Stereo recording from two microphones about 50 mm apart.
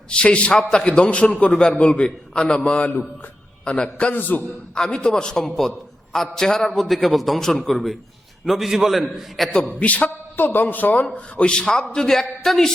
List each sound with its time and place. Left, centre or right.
0.1 s a man's voice: left
0.5 s a man's voice: centre
0.9 s a man's voice: left
4.1 s a man's voice: left
4.7 s a man's voice: centre
5.4 s a man's voice: centre
9.7 s a man's voice: left
11.0 s a man's voice: left